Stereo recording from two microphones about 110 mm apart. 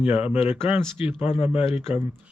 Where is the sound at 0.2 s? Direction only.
15° right (ahead or behind).